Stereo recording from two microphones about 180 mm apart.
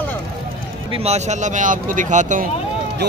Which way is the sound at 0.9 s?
35° right (ahead or behind).